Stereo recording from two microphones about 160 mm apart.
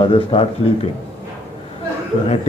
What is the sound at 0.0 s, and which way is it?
Speech, 35° left (ahead or behind).